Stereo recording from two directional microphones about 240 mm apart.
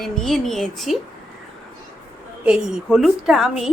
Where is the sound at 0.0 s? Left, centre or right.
Centre.